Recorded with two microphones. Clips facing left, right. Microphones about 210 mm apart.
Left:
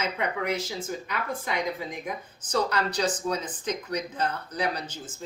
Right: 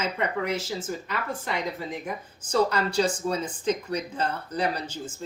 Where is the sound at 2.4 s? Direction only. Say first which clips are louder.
Right 3 dB; 10° right (ahead or behind).